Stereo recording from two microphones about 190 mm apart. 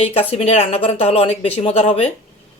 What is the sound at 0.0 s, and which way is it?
A woman's voice, 30° left (ahead or behind).